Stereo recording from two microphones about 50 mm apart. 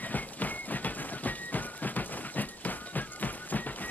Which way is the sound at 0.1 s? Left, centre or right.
Left.